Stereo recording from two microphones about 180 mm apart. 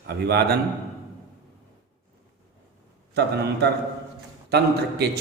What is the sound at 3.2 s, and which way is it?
A man's voice, 65° right (ahead or behind).